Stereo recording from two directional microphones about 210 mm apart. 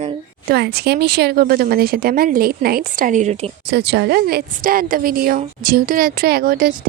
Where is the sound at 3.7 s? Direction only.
50° right (ahead or behind).